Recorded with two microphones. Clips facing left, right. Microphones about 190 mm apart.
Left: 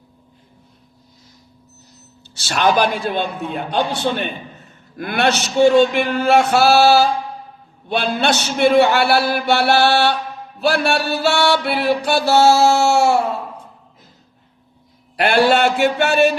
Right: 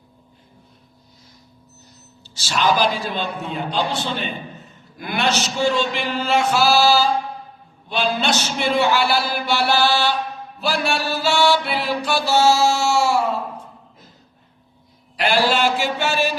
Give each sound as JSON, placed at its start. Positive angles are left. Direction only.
{"t": 2.3, "sound": "mantra", "side_deg": 60}
{"t": 15.1, "sound": "mantra", "side_deg": 60}